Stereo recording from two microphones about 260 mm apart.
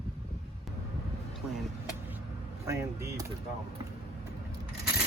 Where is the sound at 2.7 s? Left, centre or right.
Centre.